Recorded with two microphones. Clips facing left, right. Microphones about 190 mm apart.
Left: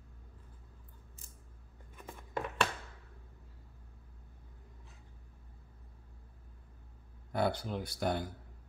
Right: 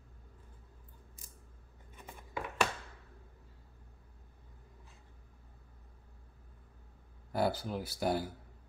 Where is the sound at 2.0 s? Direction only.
10° right (ahead or behind).